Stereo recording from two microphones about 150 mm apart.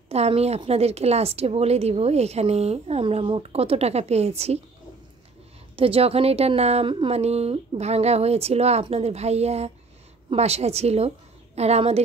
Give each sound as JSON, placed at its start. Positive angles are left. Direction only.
{"t": 0.1, "sound": "a woman's voice", "side_deg": -45}
{"t": 5.8, "sound": "a woman's voice", "side_deg": -40}